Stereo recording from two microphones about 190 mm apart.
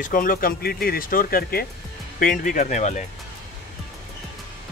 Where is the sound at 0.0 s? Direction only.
45° left (ahead or behind).